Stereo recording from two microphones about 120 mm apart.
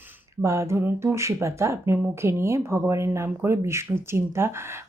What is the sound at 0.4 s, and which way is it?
Speech, 25° right (ahead or behind).